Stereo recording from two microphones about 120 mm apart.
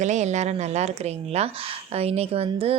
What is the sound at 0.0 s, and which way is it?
A woman's voice, 75° right (ahead or behind).